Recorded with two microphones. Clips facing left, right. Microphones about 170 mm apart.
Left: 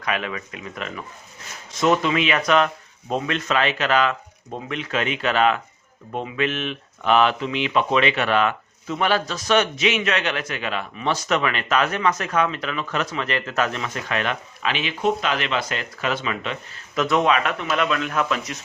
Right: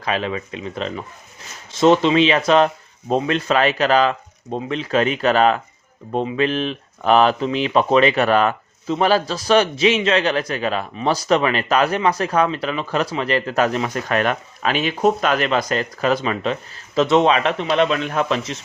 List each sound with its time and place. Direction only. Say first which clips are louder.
0.0 s speech: right 4 dB; 30° right (ahead or behind)